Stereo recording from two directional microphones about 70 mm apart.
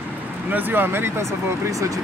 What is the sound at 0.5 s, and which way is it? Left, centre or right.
Speech, right.